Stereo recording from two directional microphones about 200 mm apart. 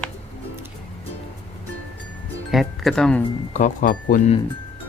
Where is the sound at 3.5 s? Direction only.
40° left (ahead or behind).